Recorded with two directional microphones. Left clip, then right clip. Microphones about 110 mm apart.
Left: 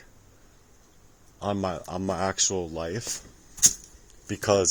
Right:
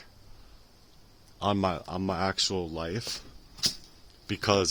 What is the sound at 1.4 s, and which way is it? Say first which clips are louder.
Speech: right 1 dB; 35° right (ahead or behind).